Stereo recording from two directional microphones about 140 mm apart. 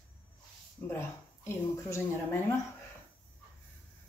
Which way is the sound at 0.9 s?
20° left (ahead or behind).